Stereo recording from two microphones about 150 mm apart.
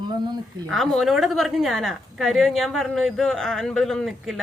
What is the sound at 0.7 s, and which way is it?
A woman's voice, centre (ahead or behind).